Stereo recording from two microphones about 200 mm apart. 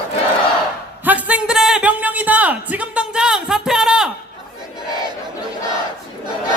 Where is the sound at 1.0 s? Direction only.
10° right (ahead or behind).